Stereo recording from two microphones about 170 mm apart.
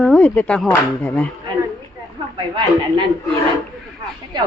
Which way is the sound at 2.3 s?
30° right (ahead or behind).